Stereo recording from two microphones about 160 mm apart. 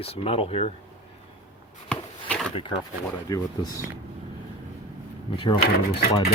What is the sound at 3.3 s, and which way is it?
Speech, 20° left (ahead or behind).